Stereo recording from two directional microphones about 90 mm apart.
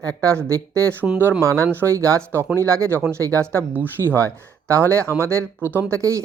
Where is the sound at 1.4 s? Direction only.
35° right (ahead or behind).